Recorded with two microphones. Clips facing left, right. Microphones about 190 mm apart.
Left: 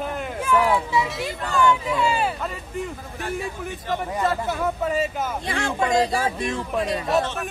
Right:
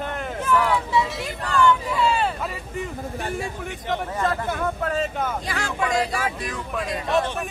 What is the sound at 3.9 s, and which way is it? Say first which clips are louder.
Speech: left 1 dB; 5° left (ahead or behind).